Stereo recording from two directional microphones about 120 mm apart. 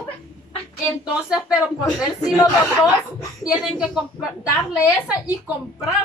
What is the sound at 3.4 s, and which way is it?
Speech, 5° right (ahead or behind).